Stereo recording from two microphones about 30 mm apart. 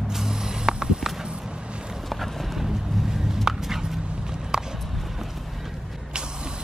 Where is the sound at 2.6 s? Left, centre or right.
Centre.